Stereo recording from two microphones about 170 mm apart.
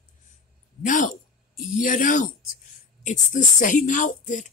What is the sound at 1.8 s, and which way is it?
Speech, 55° left (ahead or behind).